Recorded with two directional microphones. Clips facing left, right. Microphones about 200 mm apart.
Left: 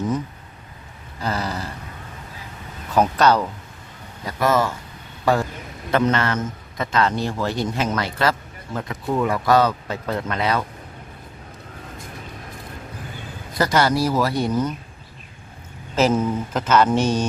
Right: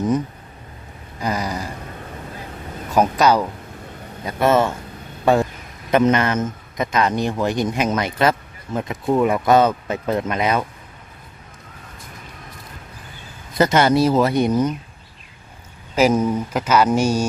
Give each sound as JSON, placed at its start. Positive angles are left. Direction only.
{"t": 1.2, "sound": "a man's voice", "side_deg": -15}
{"t": 2.9, "sound": "a man's voice", "side_deg": -10}
{"t": 4.3, "sound": "a man's voice", "side_deg": -25}
{"t": 13.6, "sound": "a man's voice", "side_deg": -20}
{"t": 16.0, "sound": "a man's voice", "side_deg": -10}